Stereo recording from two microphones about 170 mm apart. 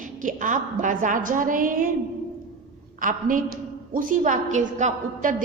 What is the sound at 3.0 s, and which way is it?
A woman's voice, 50° right (ahead or behind).